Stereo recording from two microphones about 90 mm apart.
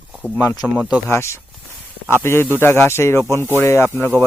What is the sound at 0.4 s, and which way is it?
Speech, 45° left (ahead or behind).